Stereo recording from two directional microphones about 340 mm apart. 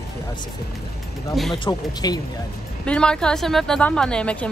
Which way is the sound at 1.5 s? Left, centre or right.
Centre.